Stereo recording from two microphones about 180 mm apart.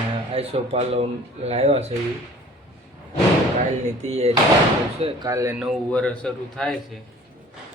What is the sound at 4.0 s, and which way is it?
Speech, 35° right (ahead or behind).